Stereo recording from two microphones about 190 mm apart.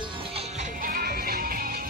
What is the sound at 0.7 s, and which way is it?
Music, 50° right (ahead or behind).